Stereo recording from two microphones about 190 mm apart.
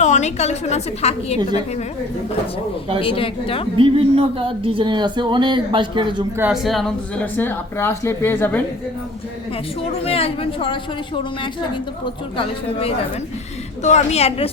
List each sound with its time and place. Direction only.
0.0 s a woman's voice: 40° left (ahead or behind)
3.0 s speech: 30° left (ahead or behind)
3.8 s speech: 30° right (ahead or behind)
6.5 s a woman's voice: centre (ahead or behind)
10.0 s a woman's voice: 30° left (ahead or behind)
13.8 s a woman's voice: 35° left (ahead or behind)